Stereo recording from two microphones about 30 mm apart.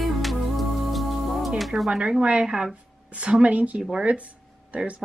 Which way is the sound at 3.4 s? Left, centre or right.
Right.